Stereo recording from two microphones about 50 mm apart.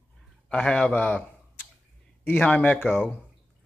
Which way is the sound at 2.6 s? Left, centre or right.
Left.